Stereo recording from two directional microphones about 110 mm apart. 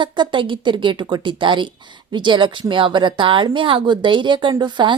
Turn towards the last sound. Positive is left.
turn(degrees=-45)  # may be behind; listen again after turning